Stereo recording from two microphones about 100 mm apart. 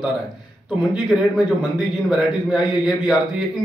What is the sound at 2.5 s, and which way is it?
Speech, 5° right (ahead or behind).